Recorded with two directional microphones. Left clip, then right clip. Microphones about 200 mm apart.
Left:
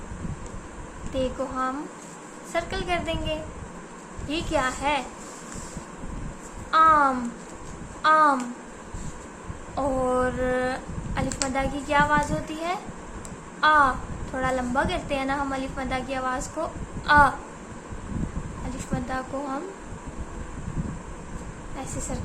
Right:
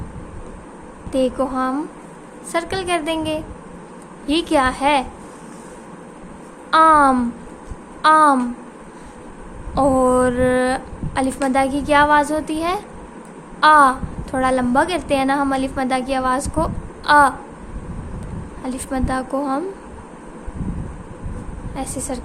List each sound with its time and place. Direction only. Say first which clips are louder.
1.1 s a woman's voice: right 9 dB; 45° right (ahead or behind)
6.7 s a woman's voice: right 6 dB; 45° right (ahead or behind)
9.7 s a woman's voice: right 9 dB; 45° right (ahead or behind)
18.9 s a woman's voice: right 8 dB; 45° right (ahead or behind)
21.8 s a woman's voice: right 9 dB; 45° right (ahead or behind)